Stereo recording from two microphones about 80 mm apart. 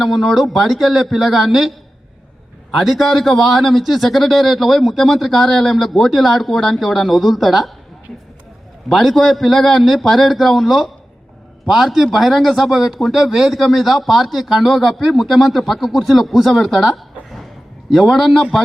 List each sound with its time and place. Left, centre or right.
0.0 s speech: centre
2.7 s speech: centre
8.9 s a man's voice: centre